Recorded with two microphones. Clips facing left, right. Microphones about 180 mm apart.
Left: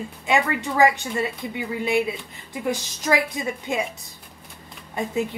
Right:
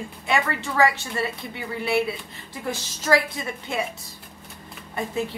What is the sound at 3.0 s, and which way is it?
Speech, 15° left (ahead or behind).